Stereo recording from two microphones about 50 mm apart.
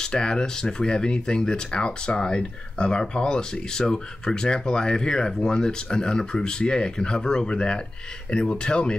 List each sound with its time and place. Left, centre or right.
0.0 s speech: centre